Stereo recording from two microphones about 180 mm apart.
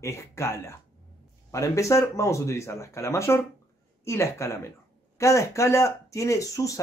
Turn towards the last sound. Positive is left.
turn(degrees=20)  # may be behind; listen again after turning